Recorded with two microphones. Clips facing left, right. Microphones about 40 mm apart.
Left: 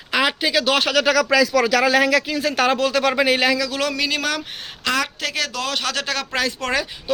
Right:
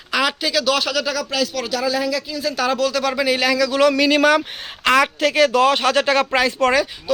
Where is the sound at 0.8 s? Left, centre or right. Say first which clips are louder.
Left 3 dB; left.